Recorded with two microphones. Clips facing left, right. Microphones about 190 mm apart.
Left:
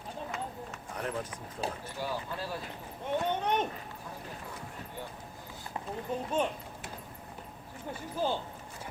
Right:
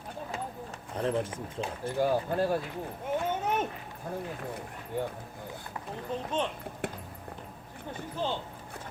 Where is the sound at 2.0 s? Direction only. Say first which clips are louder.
Right 10 dB; 50° right (ahead or behind).